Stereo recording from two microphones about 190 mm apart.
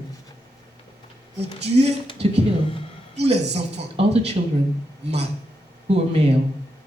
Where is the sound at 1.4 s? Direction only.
60° right (ahead or behind).